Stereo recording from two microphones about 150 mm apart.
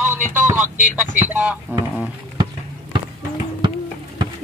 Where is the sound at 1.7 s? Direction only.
10° right (ahead or behind).